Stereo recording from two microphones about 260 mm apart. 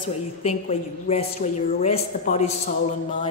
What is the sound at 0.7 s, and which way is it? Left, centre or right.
A woman's voice, left.